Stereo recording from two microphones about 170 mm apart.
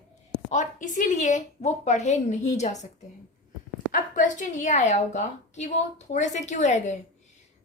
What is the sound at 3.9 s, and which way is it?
A woman's voice, 50° left (ahead or behind).